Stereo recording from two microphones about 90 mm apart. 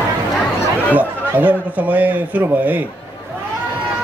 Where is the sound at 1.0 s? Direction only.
20° right (ahead or behind).